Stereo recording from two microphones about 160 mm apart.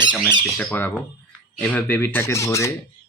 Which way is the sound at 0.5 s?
10° left (ahead or behind).